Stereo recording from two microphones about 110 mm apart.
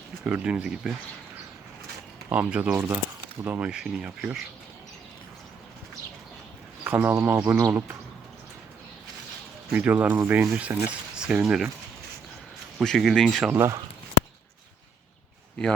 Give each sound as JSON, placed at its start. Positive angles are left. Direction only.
{"t": 0.3, "sound": "speech", "side_deg": -10}
{"t": 2.3, "sound": "speech", "side_deg": -15}
{"t": 2.7, "sound": "speech", "side_deg": -25}
{"t": 6.8, "sound": "speech", "side_deg": -20}
{"t": 9.7, "sound": "speech", "side_deg": -10}
{"t": 12.8, "sound": "speech", "side_deg": 0}
{"t": 13.5, "sound": "speech", "side_deg": -20}